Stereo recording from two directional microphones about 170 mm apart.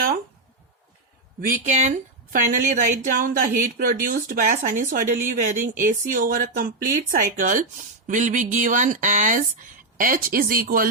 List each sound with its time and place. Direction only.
1.4 s speech: 50° right (ahead or behind)